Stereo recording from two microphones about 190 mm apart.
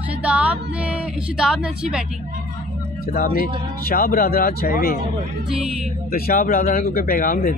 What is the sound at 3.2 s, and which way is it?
Speech, 45° left (ahead or behind).